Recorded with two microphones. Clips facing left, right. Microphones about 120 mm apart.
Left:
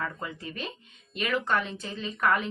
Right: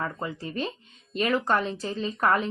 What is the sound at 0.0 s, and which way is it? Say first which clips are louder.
A woman's voice: right 3 dB; 30° right (ahead or behind).